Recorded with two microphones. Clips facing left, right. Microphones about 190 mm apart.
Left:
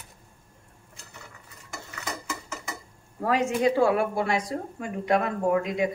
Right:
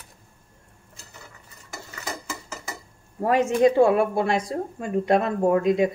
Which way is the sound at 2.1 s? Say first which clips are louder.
Right 1 dB; 35° right (ahead or behind).